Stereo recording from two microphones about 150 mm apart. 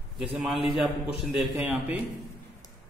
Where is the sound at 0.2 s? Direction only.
5° right (ahead or behind).